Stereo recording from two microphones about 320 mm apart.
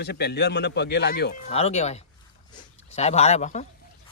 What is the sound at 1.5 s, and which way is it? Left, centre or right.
Speech, centre.